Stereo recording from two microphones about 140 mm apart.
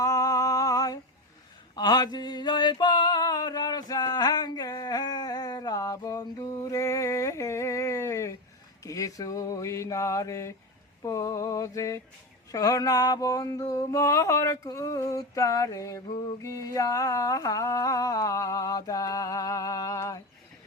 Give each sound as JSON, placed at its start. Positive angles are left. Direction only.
{"t": 0.0, "sound": "a sound", "side_deg": 25}
{"t": 8.8, "sound": "mantra", "side_deg": 25}
{"t": 11.0, "sound": "humming", "side_deg": 25}